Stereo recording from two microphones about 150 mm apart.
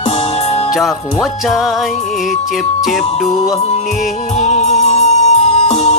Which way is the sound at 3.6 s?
45° left (ahead or behind).